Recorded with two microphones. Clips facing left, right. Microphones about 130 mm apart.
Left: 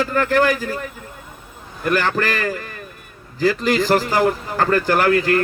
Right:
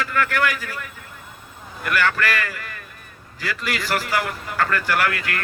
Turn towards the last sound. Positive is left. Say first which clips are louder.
# left 8 dB
turn(degrees=30)  # may be behind; listen again after turning